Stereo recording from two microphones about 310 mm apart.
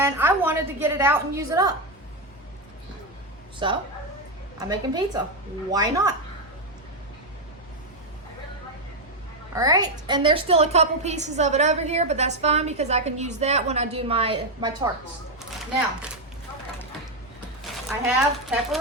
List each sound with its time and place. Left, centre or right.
0.0 s a woman's voice: centre
3.6 s a woman's voice: centre
9.6 s a woman's voice: centre
17.6 s a sound: centre